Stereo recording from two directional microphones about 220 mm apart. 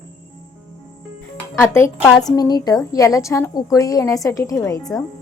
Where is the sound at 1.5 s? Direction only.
10° left (ahead or behind).